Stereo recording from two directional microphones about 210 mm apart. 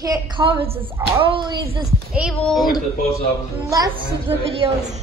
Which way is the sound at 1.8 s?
Centre (ahead or behind).